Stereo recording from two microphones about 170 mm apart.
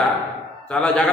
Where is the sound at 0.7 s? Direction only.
5° left (ahead or behind).